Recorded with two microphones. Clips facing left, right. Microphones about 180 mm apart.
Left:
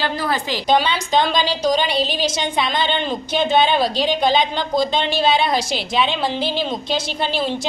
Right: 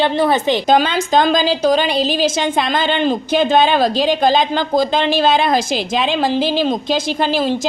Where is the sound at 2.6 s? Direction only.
45° right (ahead or behind).